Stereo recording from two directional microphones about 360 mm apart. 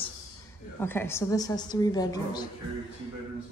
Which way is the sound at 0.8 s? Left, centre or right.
Centre.